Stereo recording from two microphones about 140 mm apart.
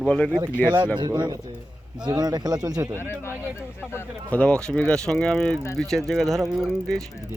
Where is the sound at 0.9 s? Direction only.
30° right (ahead or behind).